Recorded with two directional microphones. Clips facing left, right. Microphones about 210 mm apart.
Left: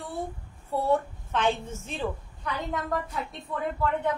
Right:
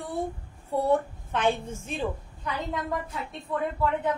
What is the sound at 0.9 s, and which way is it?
A woman's voice, 10° right (ahead or behind).